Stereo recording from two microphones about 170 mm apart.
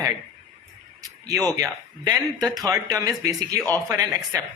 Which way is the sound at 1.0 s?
20° right (ahead or behind).